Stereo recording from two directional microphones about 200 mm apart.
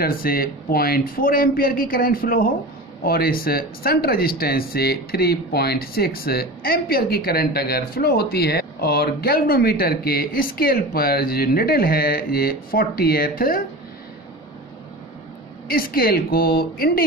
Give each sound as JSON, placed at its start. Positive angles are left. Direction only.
{"t": 0.0, "sound": "speech", "side_deg": 45}
{"t": 15.7, "sound": "speech", "side_deg": 45}